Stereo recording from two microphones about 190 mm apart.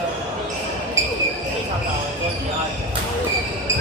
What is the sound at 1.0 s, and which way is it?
Basketball bounce, 15° right (ahead or behind).